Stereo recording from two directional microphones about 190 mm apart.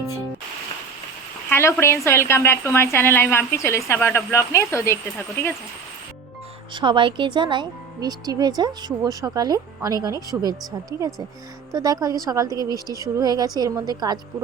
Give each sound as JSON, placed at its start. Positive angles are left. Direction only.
{"t": 1.5, "sound": "a woman's voice", "side_deg": 15}
{"t": 6.7, "sound": "speech", "side_deg": -25}
{"t": 11.7, "sound": "speech", "side_deg": -20}